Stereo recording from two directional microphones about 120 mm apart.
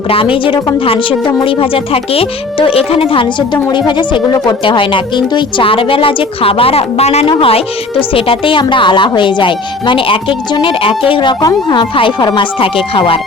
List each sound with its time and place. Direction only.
0.1 s speech: 50° left (ahead or behind)